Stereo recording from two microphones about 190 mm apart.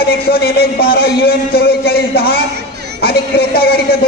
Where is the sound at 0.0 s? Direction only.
55° left (ahead or behind).